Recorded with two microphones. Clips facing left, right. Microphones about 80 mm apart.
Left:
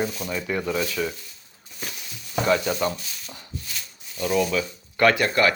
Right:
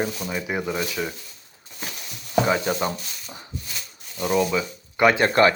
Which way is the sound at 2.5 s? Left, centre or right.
Right.